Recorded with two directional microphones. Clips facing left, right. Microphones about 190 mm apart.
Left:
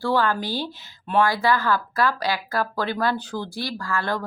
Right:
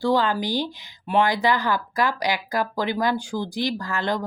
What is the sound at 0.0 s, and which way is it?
Speech, 15° right (ahead or behind).